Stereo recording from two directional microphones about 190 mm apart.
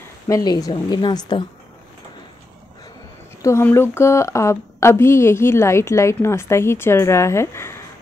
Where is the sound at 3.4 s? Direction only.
15° left (ahead or behind).